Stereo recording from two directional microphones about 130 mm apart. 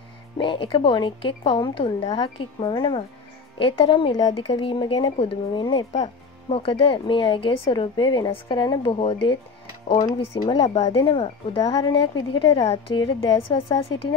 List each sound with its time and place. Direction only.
0.4 s a woman's voice: 40° left (ahead or behind)
6.5 s a woman's voice: 45° left (ahead or behind)
10.4 s a woman's voice: 35° left (ahead or behind)